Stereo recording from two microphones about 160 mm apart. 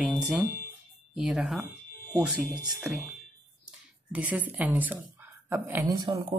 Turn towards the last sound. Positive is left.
turn(degrees=-25)  # may be behind; listen again after turning